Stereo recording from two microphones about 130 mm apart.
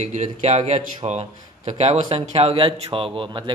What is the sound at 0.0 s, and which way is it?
Speech, 65° right (ahead or behind).